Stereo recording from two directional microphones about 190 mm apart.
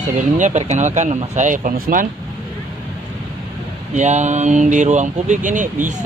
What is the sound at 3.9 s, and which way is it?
Speech, 35° right (ahead or behind).